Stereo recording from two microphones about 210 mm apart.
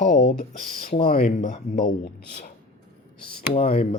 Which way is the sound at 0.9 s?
45° left (ahead or behind).